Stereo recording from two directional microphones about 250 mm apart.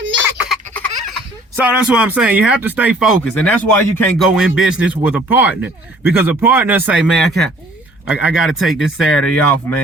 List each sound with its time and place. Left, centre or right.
0.3 s baby laughter: centre
1.5 s speech: centre